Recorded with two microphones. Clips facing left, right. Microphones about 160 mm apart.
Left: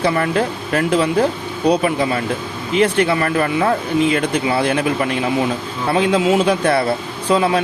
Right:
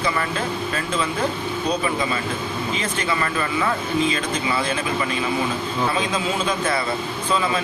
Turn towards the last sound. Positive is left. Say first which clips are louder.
# left 6 dB
turn(degrees=65)  # may be behind; listen again after turning